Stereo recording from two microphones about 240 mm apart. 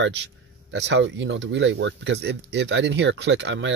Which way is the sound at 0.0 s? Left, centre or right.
Right.